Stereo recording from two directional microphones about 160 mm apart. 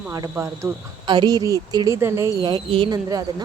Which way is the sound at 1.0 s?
30° right (ahead or behind).